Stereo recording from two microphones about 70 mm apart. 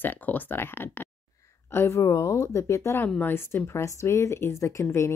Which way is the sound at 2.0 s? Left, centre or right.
Left.